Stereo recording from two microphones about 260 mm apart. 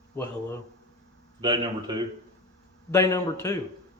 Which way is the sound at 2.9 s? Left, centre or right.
Centre.